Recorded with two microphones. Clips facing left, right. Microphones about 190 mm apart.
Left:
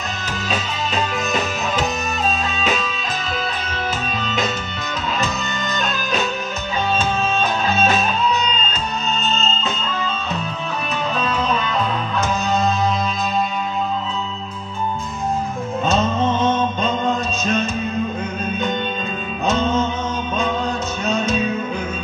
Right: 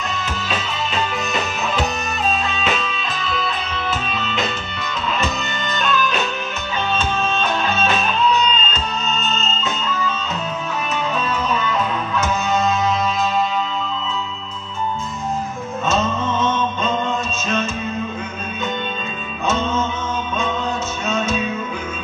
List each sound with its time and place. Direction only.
3.3 s music: 40° left (ahead or behind)
5.8 s music: 40° left (ahead or behind)
9.4 s music: 30° left (ahead or behind)
15.8 s music: 30° left (ahead or behind)
19.4 s music: 35° left (ahead or behind)